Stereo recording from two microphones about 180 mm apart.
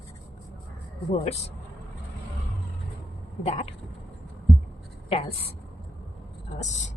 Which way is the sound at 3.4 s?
35° left (ahead or behind).